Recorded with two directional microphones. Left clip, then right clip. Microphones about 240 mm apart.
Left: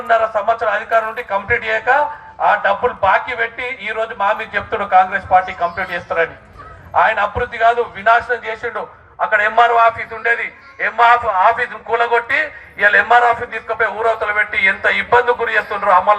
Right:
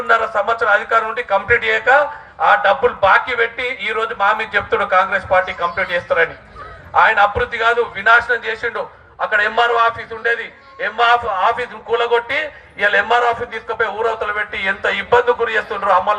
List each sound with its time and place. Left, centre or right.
0.1 s a man's voice: right